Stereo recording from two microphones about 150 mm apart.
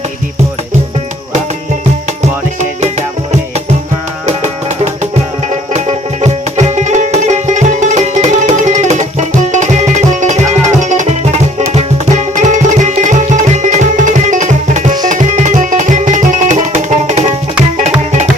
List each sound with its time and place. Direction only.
6.2 s music: 50° right (ahead or behind)